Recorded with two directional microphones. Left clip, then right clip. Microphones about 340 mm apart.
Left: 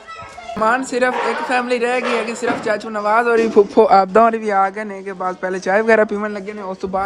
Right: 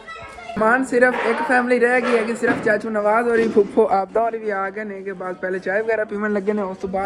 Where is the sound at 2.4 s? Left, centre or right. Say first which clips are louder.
Right 1 dB; centre.